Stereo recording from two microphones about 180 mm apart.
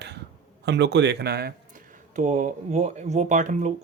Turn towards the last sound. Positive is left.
turn(degrees=-45)  # may be behind; listen again after turning